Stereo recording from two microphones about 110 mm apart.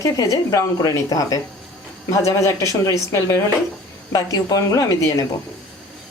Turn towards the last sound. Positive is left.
turn(degrees=30)  # may be behind; listen again after turning